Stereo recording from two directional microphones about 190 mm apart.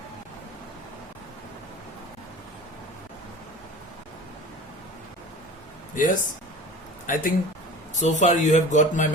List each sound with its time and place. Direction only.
5.9 s speech: 45° left (ahead or behind)